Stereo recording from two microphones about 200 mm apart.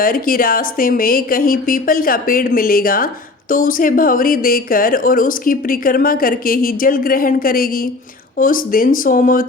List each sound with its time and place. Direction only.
0.0 s speech: 45° left (ahead or behind)